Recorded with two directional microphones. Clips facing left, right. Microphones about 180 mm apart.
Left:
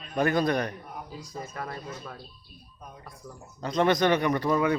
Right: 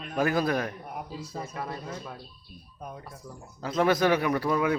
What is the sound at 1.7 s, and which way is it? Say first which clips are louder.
Speech: right 1 dB; 15° right (ahead or behind).